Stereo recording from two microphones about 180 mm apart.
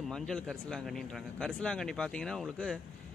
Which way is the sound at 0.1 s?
5° left (ahead or behind).